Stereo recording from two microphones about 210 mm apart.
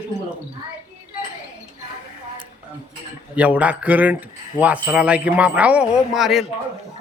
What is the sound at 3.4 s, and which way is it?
A man's voice, 5° right (ahead or behind).